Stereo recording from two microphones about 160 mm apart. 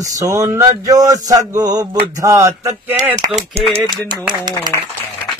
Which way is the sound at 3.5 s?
35° right (ahead or behind).